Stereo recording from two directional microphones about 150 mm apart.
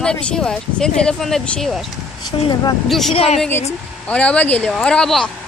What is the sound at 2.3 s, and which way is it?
Speech, 30° left (ahead or behind).